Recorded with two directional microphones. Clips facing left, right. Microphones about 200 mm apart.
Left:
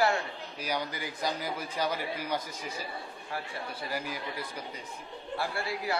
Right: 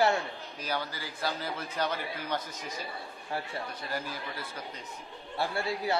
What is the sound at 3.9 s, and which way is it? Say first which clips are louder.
Speech: left 1 dB; 15° left (ahead or behind).